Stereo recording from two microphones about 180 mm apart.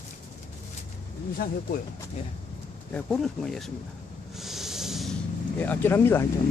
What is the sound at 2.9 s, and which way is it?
Speech, 5° left (ahead or behind).